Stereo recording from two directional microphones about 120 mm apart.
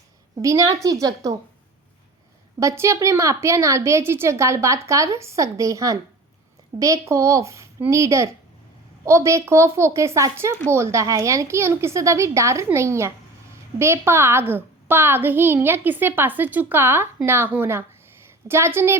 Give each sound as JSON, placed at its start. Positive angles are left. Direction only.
{"t": 0.3, "sound": "a child's voice", "side_deg": -25}
{"t": 2.6, "sound": "a child's voice", "side_deg": -25}